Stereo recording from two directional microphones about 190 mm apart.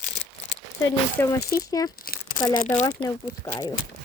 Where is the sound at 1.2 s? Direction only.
10° left (ahead or behind).